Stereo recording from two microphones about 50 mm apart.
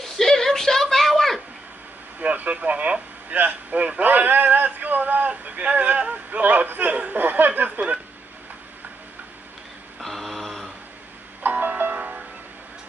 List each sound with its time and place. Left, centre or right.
0.0 s a sound: centre
2.1 s speech: right
9.9 s mantra: centre
11.4 s music: right